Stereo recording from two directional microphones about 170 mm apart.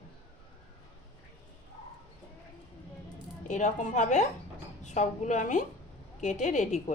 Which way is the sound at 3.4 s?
45° left (ahead or behind).